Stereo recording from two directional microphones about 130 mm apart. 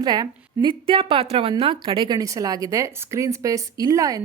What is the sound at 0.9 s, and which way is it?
A woman's voice, 45° right (ahead or behind).